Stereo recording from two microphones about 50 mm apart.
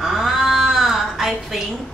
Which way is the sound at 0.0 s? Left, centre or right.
Centre.